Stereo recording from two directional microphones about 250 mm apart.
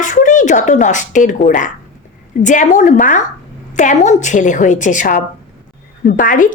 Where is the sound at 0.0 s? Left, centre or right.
Left.